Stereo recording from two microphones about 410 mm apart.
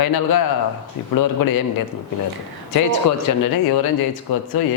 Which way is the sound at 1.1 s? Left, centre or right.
Left.